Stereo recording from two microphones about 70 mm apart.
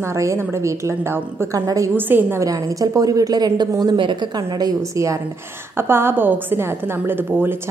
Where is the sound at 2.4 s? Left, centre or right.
Right.